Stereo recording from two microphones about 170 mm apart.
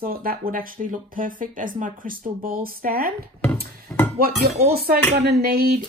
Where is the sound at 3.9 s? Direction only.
10° left (ahead or behind).